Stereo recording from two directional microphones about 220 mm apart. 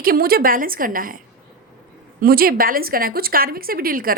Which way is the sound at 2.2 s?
40° right (ahead or behind).